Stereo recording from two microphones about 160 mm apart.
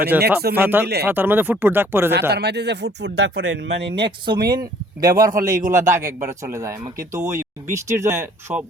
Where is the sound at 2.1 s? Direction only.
90° right.